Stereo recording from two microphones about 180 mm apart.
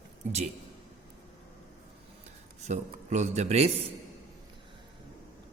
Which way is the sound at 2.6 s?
40° right (ahead or behind).